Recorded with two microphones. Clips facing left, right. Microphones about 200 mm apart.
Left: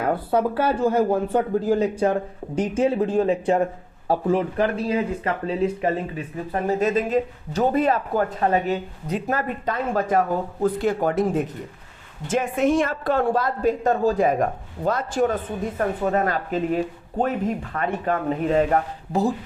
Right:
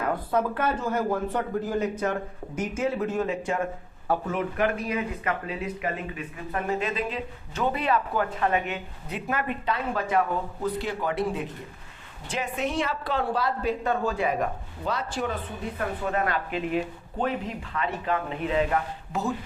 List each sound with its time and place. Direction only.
0.0 s a woman's voice: 30° left (ahead or behind)